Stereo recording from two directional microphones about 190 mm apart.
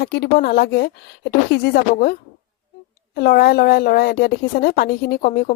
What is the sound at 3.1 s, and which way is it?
Speech, 55° left (ahead or behind).